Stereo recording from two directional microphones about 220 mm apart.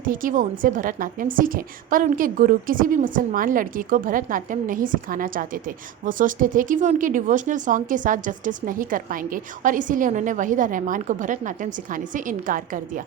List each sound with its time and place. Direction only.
0.0 s a woman's voice: 40° right (ahead or behind)